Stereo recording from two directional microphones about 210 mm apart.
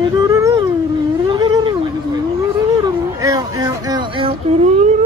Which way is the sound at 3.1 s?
15° right (ahead or behind).